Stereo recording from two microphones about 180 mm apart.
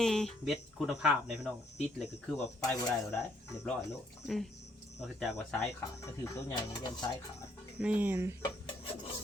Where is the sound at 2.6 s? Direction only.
20° left (ahead or behind).